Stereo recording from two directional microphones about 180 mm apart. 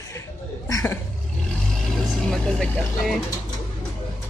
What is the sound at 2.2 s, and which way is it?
Speech, centre (ahead or behind).